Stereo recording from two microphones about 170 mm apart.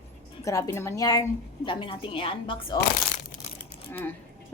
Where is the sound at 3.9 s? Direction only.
10° left (ahead or behind).